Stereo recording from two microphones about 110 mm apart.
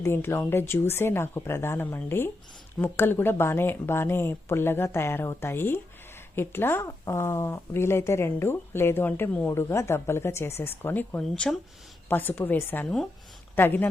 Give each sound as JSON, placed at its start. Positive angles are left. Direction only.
{"t": 0.0, "sound": "speech", "side_deg": 25}
{"t": 11.2, "sound": "speech", "side_deg": 5}
{"t": 12.0, "sound": "speech", "side_deg": 15}